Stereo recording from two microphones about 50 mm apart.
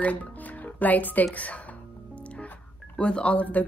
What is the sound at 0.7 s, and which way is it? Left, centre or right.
Speech, left.